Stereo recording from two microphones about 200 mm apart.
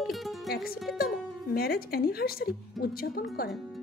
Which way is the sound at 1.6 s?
50° left (ahead or behind).